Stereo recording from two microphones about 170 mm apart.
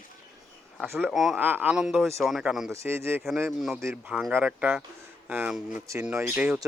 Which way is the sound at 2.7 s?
15° right (ahead or behind).